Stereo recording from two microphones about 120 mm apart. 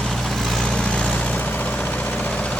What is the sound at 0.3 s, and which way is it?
Vehicle, 5° left (ahead or behind).